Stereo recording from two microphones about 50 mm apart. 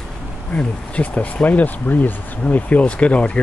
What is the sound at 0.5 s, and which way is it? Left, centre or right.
Speech, left.